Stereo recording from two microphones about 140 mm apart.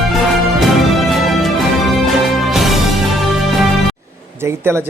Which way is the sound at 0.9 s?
Centre (ahead or behind).